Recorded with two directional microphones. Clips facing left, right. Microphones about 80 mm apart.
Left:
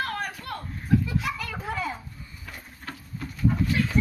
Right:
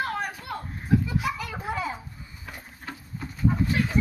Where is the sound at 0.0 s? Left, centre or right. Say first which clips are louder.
Right 1 dB; centre.